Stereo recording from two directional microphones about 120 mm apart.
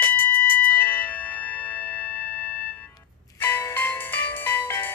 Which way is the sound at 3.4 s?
15° left (ahead or behind).